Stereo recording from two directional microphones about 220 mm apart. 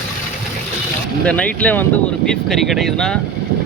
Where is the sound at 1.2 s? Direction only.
5° left (ahead or behind).